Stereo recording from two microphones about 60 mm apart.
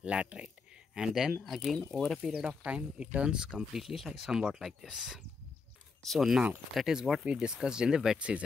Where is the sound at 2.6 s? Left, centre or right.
Centre.